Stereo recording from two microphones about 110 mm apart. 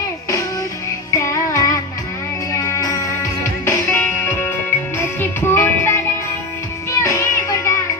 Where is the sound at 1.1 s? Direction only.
30° left (ahead or behind).